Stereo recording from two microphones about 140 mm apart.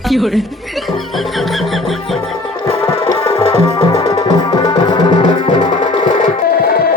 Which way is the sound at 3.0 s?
30° left (ahead or behind).